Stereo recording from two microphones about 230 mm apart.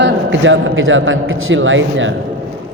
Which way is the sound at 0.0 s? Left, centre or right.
Right.